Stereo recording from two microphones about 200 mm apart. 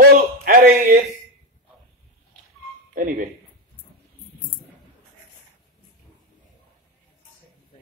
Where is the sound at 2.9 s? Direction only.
45° right (ahead or behind).